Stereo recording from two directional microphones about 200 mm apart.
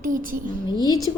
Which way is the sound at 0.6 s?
20° left (ahead or behind).